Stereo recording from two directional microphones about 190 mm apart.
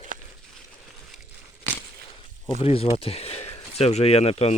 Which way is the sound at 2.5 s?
30° left (ahead or behind).